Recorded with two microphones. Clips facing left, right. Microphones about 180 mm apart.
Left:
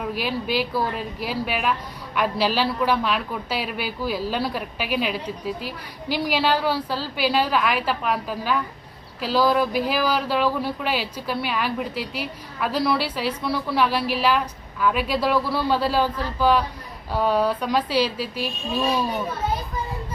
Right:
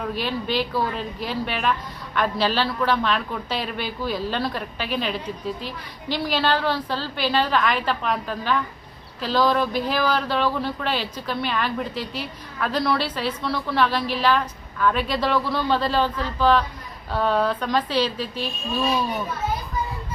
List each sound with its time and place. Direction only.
0.0 s speech: 10° left (ahead or behind)